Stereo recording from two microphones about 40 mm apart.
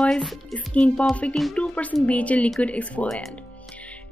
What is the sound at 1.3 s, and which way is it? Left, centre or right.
Speech, centre.